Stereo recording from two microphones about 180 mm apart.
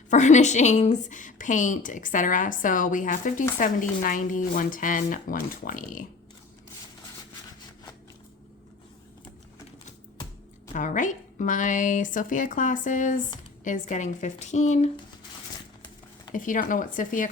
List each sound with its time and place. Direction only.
0.1 s a woman's voice: 40° left (ahead or behind)
10.7 s a woman's voice: 45° left (ahead or behind)
16.3 s a woman's voice: 45° left (ahead or behind)